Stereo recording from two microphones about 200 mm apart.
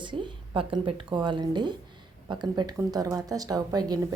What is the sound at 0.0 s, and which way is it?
A woman's voice, 25° right (ahead or behind).